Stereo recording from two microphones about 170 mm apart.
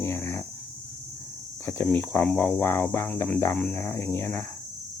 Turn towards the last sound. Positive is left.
turn(degrees=15)  # may be behind; listen again after turning